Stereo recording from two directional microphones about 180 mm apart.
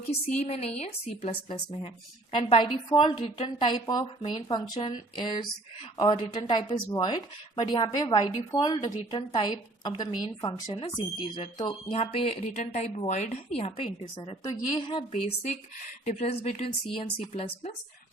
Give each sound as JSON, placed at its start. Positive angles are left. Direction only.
{"t": 0.4, "sound": "speech", "side_deg": 35}
{"t": 16.0, "sound": "speech", "side_deg": 40}